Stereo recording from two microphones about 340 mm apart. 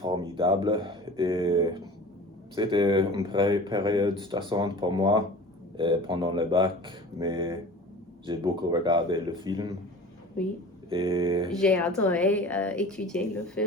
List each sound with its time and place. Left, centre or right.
0.0 s speech: centre
10.8 s speech: centre
11.4 s speech: centre